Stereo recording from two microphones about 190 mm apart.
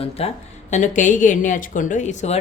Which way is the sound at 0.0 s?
30° left (ahead or behind).